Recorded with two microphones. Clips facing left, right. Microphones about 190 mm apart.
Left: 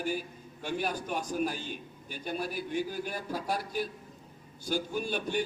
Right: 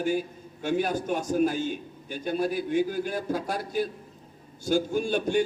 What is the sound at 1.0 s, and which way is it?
A man's voice, 45° right (ahead or behind).